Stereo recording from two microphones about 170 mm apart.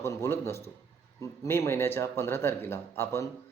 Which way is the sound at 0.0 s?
15° left (ahead or behind).